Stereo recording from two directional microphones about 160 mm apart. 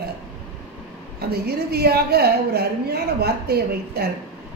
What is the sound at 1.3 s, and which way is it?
A woman's voice, 80° right.